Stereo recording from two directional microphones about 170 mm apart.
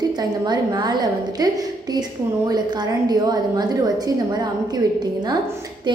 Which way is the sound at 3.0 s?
25° right (ahead or behind).